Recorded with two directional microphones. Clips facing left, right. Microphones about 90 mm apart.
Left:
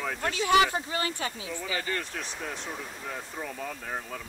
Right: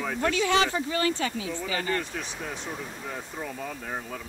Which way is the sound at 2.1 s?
Centre (ahead or behind).